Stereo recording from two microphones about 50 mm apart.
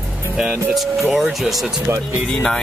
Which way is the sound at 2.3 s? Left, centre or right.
Left.